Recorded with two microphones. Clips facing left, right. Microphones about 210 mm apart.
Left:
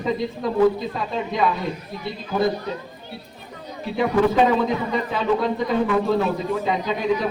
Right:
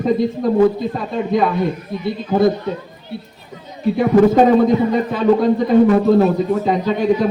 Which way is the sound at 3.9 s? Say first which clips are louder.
Right 6 dB; 50° right (ahead or behind).